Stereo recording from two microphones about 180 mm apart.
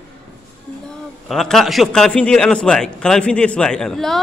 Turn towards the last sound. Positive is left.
turn(degrees=0)  # may be behind; listen again after turning